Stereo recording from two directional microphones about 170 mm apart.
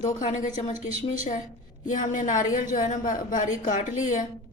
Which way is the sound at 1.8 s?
50° left (ahead or behind).